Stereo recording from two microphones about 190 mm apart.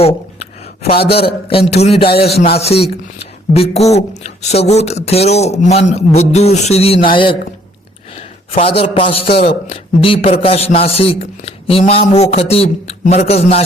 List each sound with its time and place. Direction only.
1.1 s a man's voice: 30° left (ahead or behind)
2.0 s a man's voice: 55° left (ahead or behind)
2.5 s a man's voice: 30° left (ahead or behind)